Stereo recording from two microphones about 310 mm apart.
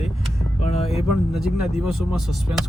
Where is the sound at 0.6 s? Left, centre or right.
Centre.